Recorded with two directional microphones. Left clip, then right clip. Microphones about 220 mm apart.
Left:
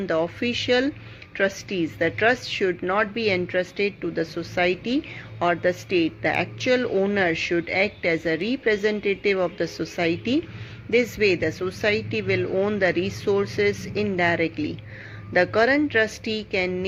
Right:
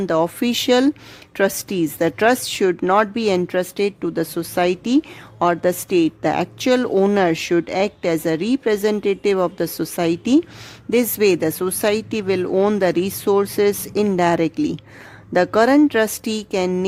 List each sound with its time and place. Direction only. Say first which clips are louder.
0.0 s speech: right 5 dB; 45° right (ahead or behind)